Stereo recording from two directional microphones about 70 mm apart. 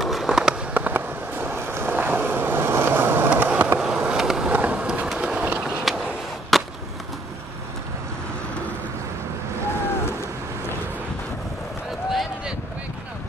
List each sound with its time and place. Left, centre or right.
0.0 s fireworks: centre
0.7 s vehicle: right
3.8 s a sound: centre
4.5 s vehicle: right
6.5 s skateboard: centre
12.1 s a sound: centre